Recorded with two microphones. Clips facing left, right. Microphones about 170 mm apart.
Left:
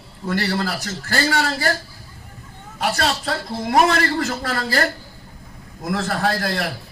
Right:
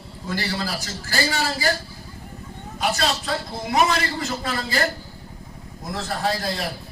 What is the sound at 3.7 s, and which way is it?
A man's voice, 55° left (ahead or behind).